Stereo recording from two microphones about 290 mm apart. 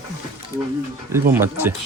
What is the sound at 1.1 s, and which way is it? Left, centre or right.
Speech, centre.